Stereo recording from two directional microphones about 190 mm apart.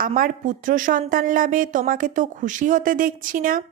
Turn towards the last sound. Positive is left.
turn(degrees=-45)  # may be behind; listen again after turning